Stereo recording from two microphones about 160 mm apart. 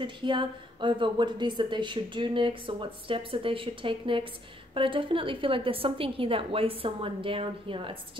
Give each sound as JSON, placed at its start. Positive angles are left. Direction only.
{"t": 0.0, "sound": "a woman's voice", "side_deg": -30}